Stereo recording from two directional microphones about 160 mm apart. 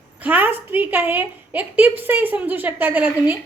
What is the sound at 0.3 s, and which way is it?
A woman's voice, 10° right (ahead or behind).